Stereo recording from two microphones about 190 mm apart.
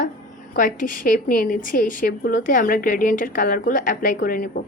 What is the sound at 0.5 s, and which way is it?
A woman's voice, 45° left (ahead or behind).